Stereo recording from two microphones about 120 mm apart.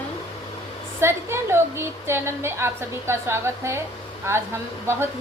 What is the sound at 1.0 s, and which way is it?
A woman's voice, 20° right (ahead or behind).